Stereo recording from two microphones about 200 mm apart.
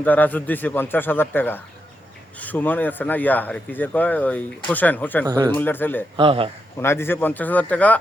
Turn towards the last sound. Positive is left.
turn(degrees=5)  # may be behind; listen again after turning